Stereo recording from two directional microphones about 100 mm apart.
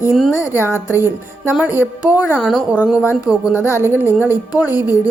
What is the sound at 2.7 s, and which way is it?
Speech, 15° right (ahead or behind).